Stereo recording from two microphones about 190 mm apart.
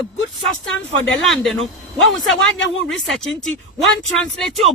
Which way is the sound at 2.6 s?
70° left (ahead or behind).